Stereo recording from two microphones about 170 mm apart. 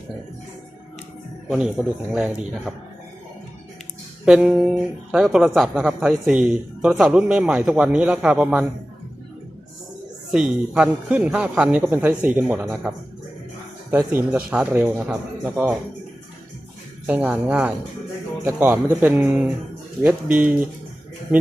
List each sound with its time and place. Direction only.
1.5 s speech: 5° right (ahead or behind)
4.3 s speech: 5° right (ahead or behind)
10.3 s a man's voice: 5° right (ahead or behind)
14.3 s a man's voice: 5° right (ahead or behind)
17.1 s a man's voice: 10° right (ahead or behind)